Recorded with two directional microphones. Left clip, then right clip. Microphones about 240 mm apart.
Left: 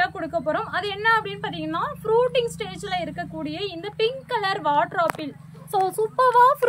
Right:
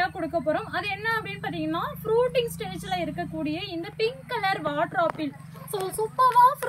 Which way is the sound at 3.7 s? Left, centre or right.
Left.